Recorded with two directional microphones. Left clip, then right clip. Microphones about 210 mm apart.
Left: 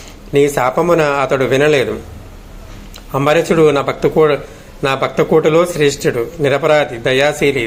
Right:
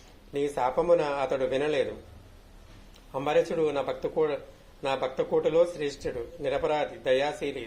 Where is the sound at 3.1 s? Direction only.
50° left (ahead or behind).